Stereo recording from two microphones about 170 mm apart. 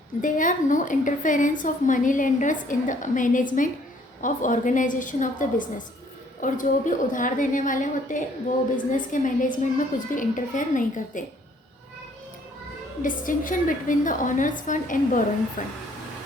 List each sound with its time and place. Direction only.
0.2 s a woman's voice: 50° left (ahead or behind)
13.0 s a woman's voice: 50° left (ahead or behind)